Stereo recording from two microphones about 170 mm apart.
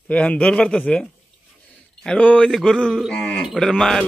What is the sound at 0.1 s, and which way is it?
A man's voice, 5° left (ahead or behind).